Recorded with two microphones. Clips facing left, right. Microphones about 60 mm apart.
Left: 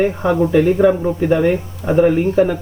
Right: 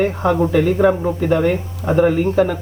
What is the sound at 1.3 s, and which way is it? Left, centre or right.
Speech, centre.